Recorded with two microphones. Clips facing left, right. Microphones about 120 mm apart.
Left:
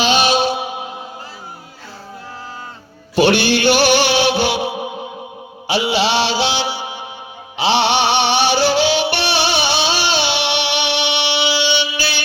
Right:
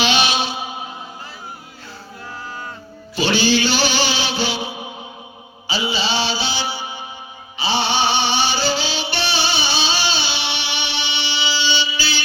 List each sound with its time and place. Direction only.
0.0 s music: 45° left (ahead or behind)
0.5 s music: 70° left (ahead or behind)
3.2 s music: 60° left (ahead or behind)